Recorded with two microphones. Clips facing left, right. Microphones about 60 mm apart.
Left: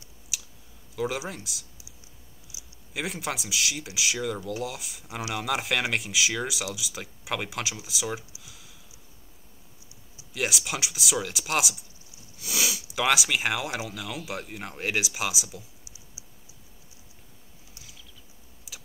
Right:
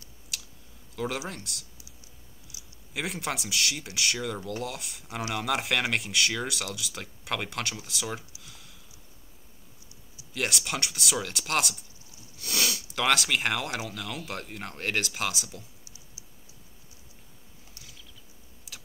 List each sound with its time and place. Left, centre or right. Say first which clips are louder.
0.3 s clicking: left 1 dB; centre
0.9 s speech: left 2 dB; centre
2.5 s a sound: left 2 dB; centre
2.9 s speech: even; centre
8.4 s a sound: even; centre
10.3 s speech: left 1 dB; centre
15.8 s computer keyboard: left 1 dB; centre
18.7 s computer keyboard: even; centre